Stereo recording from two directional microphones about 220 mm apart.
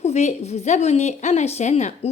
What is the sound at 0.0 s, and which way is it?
A woman's voice, 30° left (ahead or behind).